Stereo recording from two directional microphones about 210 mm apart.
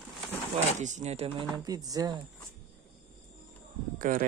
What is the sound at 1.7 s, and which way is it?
Speech, 20° right (ahead or behind).